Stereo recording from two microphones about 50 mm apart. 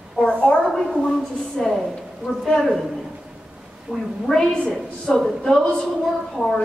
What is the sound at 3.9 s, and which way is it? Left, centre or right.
Speech, centre.